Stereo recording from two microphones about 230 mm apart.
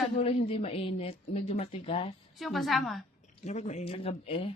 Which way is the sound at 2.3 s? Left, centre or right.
Centre.